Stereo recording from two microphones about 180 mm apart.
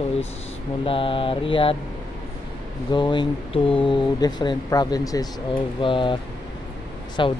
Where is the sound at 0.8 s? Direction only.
30° left (ahead or behind).